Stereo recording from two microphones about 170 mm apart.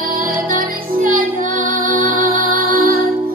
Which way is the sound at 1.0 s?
55° right (ahead or behind).